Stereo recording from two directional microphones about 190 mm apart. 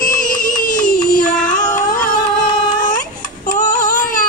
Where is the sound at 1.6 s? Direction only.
5° left (ahead or behind).